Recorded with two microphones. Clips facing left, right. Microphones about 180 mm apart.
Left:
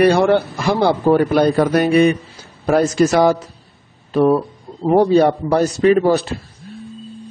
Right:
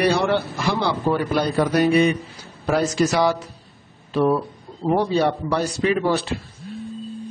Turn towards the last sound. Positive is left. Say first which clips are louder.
# left 7 dB
turn(degrees=45)  # may be behind; listen again after turning